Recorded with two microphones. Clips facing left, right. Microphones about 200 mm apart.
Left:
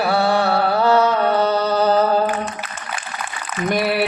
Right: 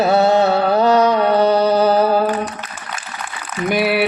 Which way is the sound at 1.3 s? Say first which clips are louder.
Right 4 dB; 15° right (ahead or behind).